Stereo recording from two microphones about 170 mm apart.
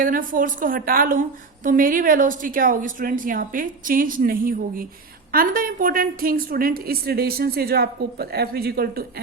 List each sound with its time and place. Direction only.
0.0 s a woman's voice: 55° right (ahead or behind)